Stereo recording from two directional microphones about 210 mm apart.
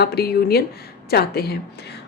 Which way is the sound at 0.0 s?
50° left (ahead or behind).